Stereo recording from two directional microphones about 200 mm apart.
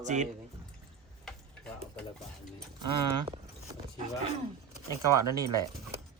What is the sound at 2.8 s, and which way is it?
Speech, 25° right (ahead or behind).